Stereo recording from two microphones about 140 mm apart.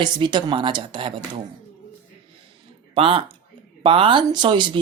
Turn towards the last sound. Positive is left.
turn(degrees=-35)  # may be behind; listen again after turning